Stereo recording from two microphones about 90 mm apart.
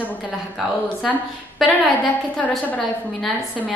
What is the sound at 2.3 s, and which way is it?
Speech, 15° left (ahead or behind).